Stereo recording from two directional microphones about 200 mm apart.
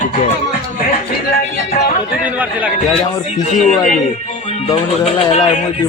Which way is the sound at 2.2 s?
5° right (ahead or behind).